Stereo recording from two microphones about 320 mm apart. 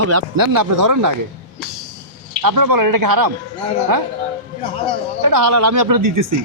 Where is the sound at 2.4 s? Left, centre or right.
Right.